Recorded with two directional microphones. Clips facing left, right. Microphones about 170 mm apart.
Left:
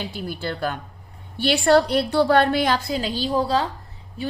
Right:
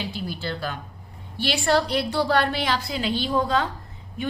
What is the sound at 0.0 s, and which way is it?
A woman's voice, 50° left (ahead or behind).